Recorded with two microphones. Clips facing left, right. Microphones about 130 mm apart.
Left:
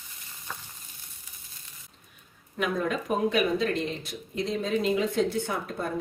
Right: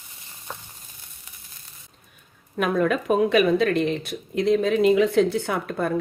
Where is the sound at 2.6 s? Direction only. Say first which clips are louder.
Right 6 dB; 60° right (ahead or behind).